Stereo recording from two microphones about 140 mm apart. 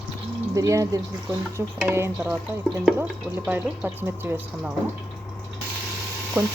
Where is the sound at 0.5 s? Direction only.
25° right (ahead or behind).